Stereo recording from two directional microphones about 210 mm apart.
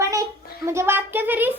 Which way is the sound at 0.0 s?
15° right (ahead or behind).